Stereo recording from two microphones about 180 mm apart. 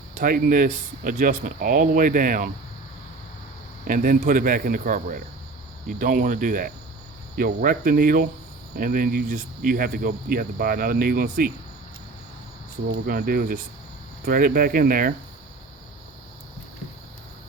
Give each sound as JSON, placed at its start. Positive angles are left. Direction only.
{"t": 0.1, "sound": "speech", "side_deg": -50}
{"t": 3.8, "sound": "speech", "side_deg": -50}
{"t": 12.9, "sound": "cricket", "side_deg": -55}
{"t": 14.3, "sound": "speech", "side_deg": -55}